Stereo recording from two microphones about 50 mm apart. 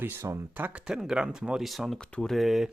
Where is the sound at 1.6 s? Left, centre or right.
Centre.